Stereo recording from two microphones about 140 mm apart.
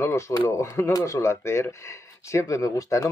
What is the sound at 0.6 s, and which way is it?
Speech, 20° left (ahead or behind).